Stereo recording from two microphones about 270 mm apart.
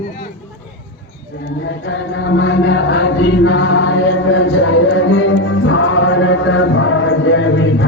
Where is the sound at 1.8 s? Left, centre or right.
Left.